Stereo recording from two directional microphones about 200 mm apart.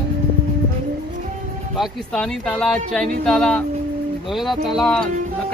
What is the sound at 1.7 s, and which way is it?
Speech, centre (ahead or behind).